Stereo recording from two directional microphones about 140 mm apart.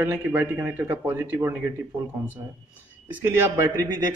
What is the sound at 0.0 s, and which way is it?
Speech, 15° right (ahead or behind).